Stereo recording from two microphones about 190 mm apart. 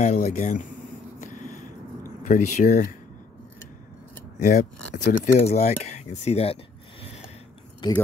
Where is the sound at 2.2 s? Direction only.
40° left (ahead or behind).